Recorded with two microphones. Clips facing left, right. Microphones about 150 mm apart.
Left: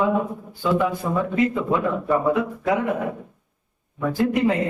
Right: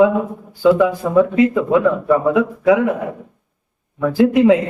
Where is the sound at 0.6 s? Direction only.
80° right.